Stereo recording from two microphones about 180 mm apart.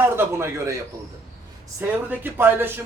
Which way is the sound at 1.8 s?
10° right (ahead or behind).